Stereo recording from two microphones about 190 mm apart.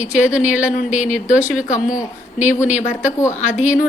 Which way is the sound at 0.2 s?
5° right (ahead or behind).